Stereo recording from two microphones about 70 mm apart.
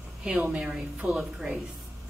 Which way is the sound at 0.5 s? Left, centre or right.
Centre.